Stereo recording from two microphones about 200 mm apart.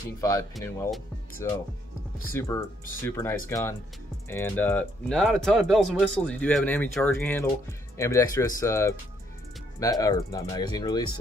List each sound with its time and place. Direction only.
0.2 s speech: 15° left (ahead or behind)